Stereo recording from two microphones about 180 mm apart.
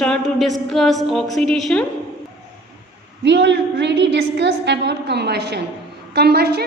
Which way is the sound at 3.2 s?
75° right (ahead or behind).